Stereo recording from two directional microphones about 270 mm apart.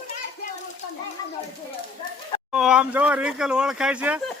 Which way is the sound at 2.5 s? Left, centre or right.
Centre.